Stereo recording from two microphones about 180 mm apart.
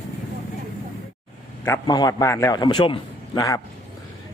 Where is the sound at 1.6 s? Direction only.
20° left (ahead or behind).